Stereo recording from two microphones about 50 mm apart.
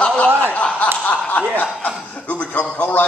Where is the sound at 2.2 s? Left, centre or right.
Left.